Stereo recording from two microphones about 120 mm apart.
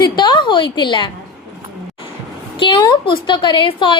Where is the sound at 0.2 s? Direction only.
40° left (ahead or behind).